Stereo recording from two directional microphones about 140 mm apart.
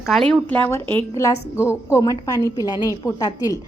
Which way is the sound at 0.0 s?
Centre (ahead or behind).